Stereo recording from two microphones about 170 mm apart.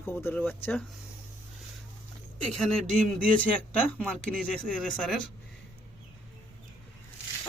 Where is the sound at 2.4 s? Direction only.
Centre (ahead or behind).